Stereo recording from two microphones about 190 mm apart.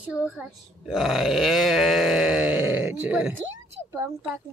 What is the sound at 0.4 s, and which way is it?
Speech, centre (ahead or behind).